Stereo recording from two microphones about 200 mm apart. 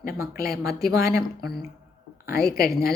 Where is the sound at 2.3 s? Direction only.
50° left (ahead or behind).